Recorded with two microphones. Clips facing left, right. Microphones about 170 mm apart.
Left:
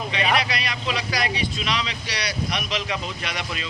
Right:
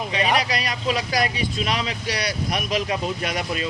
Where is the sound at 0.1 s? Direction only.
40° right (ahead or behind).